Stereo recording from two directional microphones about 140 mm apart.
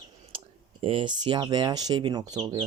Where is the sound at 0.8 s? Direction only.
40° right (ahead or behind).